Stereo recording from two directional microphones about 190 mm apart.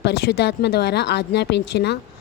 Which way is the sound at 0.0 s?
60° left (ahead or behind).